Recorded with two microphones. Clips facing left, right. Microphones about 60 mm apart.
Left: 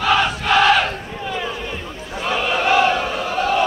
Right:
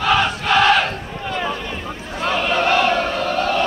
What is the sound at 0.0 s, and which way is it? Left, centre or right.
Battle cry, centre.